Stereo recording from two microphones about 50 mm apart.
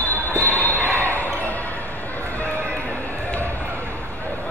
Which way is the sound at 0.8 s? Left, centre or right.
Right.